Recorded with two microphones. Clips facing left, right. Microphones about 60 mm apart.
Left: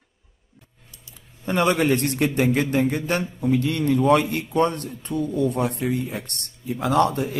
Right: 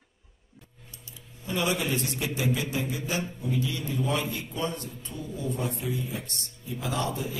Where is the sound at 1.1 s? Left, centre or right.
Left.